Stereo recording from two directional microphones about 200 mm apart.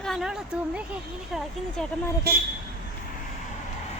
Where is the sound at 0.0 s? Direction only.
Centre (ahead or behind).